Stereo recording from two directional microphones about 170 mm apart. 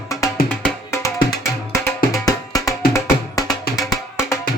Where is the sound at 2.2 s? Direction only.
20° left (ahead or behind).